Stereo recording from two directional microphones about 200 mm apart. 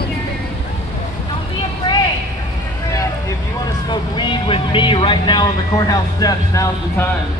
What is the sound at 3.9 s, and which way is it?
Vehicle, 25° left (ahead or behind).